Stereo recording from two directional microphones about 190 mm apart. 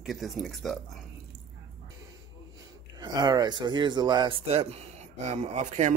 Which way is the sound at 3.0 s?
20° right (ahead or behind).